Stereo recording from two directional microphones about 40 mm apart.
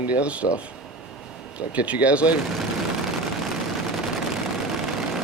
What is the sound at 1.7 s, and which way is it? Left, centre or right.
Speech, right.